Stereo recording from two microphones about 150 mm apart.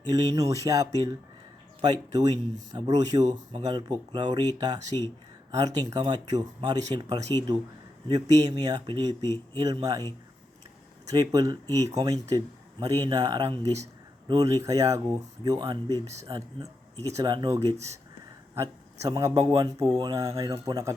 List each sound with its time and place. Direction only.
0.1 s speech: 25° right (ahead or behind)
17.7 s speech: 45° right (ahead or behind)
18.5 s a man's voice: 25° right (ahead or behind)